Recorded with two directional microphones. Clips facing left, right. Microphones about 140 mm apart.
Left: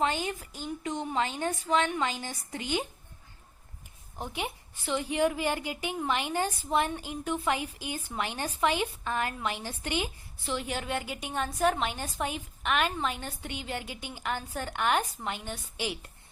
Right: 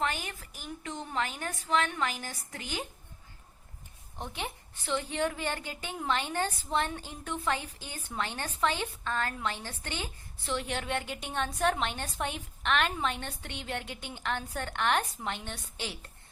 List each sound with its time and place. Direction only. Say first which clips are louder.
0.0 s a woman's voice: left 4 dB; 20° left (ahead or behind)
4.2 s a woman's voice: left 3 dB; 10° left (ahead or behind)